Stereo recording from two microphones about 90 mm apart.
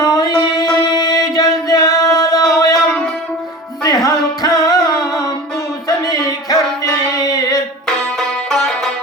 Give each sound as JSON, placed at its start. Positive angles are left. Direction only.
{"t": 0.0, "sound": "music", "side_deg": 45}
{"t": 3.8, "sound": "music", "side_deg": 45}
{"t": 6.1, "sound": "music", "side_deg": 45}
{"t": 7.1, "sound": "a sound", "side_deg": 45}
{"t": 8.4, "sound": "music", "side_deg": 5}